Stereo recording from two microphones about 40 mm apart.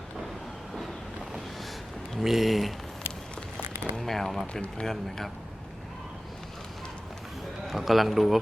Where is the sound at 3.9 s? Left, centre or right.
Centre.